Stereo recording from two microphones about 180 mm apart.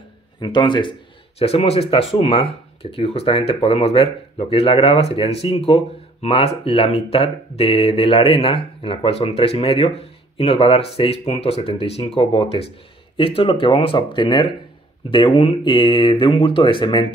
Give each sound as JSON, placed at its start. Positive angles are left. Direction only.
{"t": 0.4, "sound": "speech", "side_deg": 25}